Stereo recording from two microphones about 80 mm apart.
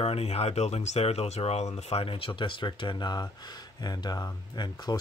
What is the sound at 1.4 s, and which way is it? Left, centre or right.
Speech, left.